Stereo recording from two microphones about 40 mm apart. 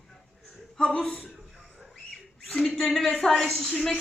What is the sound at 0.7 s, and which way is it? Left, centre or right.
Speech, left.